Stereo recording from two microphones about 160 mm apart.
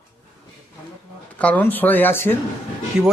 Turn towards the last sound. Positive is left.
turn(degrees=-5)  # may be behind; listen again after turning